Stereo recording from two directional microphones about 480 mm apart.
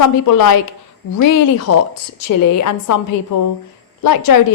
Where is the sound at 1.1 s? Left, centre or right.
Left.